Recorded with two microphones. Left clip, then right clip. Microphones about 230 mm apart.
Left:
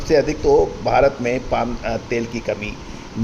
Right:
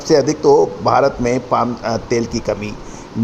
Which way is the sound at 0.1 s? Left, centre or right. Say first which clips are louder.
Right 3 dB; right.